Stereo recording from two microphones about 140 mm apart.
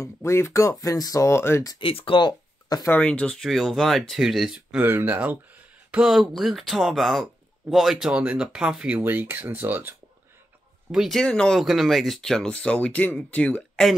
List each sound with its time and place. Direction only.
0.0 s speech: 20° left (ahead or behind)
1.8 s speech: 40° left (ahead or behind)
2.9 s speech: 10° left (ahead or behind); by 9.9 s 15° right (ahead or behind)
10.9 s speech: centre (ahead or behind)